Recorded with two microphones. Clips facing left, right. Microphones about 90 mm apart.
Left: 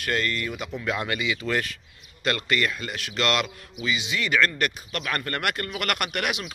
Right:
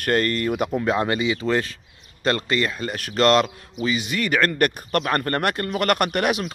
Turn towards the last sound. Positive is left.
turn(degrees=-35)  # may be behind; listen again after turning